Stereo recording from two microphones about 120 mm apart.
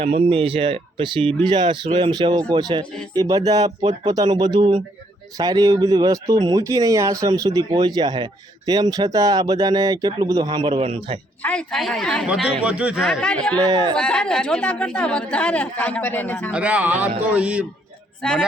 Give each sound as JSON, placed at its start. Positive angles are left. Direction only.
{"t": 0.0, "sound": "speech", "side_deg": -55}
{"t": 11.4, "sound": "a woman's voice", "side_deg": 5}
{"t": 12.3, "sound": "speech", "side_deg": -5}
{"t": 13.1, "sound": "speech", "side_deg": 10}
{"t": 13.6, "sound": "speech", "side_deg": -35}
{"t": 13.9, "sound": "speech", "side_deg": 5}
{"t": 16.5, "sound": "speech", "side_deg": -10}
{"t": 18.2, "sound": "speech", "side_deg": 5}